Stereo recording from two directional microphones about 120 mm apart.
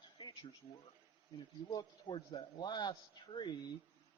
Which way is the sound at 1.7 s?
40° left (ahead or behind).